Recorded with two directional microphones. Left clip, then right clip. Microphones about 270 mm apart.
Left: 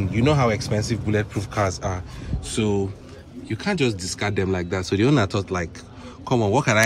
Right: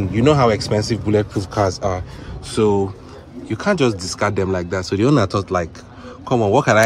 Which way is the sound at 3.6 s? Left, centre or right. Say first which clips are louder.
Right 6 dB; centre.